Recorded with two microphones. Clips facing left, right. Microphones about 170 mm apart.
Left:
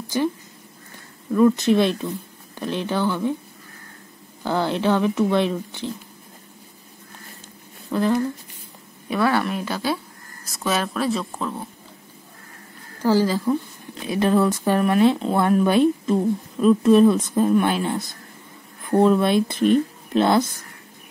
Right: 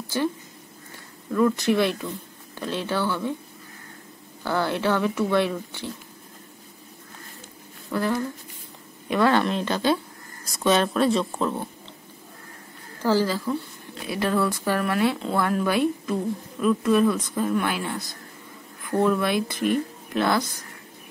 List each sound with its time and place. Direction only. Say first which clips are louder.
0.1 s speech: left 3 dB; 15° left (ahead or behind)
1.3 s speech: left 4 dB; 20° left (ahead or behind)
4.4 s a woman's voice: left 2 dB; 20° left (ahead or behind)
7.9 s speech: left 4 dB; 20° left (ahead or behind)
9.1 s speech: right 1 dB; 5° left (ahead or behind)
13.0 s a woman's voice: left 3 dB; 15° left (ahead or behind)